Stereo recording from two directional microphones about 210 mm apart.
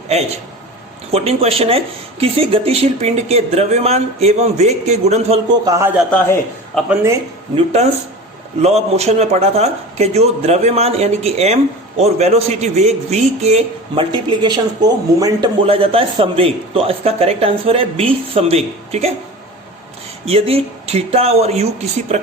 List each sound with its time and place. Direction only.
1.1 s speech: 30° right (ahead or behind)
5.6 s a man's voice: 15° right (ahead or behind)
6.0 s a man's voice: 5° left (ahead or behind)
7.5 s speech: 30° right (ahead or behind)
20.2 s speech: 30° right (ahead or behind)